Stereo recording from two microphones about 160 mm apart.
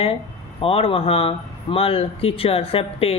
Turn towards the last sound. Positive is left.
turn(degrees=35)  # may be behind; listen again after turning